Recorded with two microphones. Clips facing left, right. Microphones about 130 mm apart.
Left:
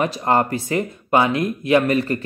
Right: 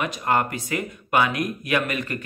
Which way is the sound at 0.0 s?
30° left (ahead or behind).